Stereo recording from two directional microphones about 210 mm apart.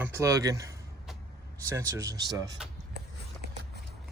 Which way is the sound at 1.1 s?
Centre (ahead or behind).